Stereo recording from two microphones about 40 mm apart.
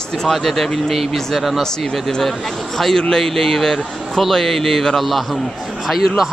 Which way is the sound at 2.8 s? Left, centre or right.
Centre.